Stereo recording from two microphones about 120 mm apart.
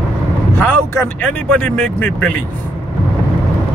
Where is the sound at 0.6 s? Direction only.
15° left (ahead or behind).